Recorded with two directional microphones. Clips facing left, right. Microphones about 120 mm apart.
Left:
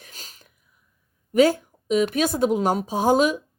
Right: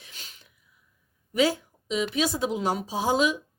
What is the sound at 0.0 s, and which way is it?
Sneeze, 40° left (ahead or behind).